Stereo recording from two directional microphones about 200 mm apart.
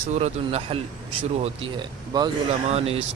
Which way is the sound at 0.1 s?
35° right (ahead or behind).